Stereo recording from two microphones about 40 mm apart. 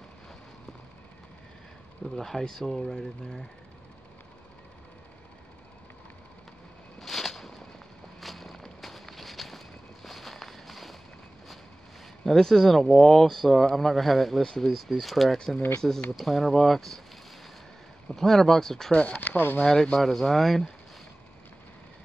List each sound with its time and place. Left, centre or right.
2.0 s speech: centre
7.0 s a sound: centre
8.2 s walk: centre
12.3 s speech: centre
14.4 s speech: centre
14.7 s speech: centre
15.8 s speech: centre
18.1 s speech: centre
18.9 s speech: left
19.1 s speech: left
19.6 s speech: centre
20.0 s speech: centre